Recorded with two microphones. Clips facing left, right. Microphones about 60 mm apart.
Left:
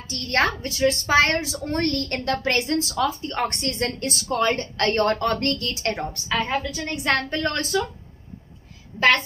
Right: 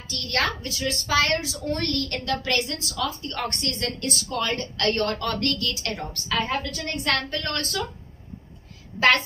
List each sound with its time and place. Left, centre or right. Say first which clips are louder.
0.1 s a woman's voice: left 4 dB; left
6.5 s a woman's voice: left 2 dB; centre
7.0 s a woman's voice: left 4 dB; left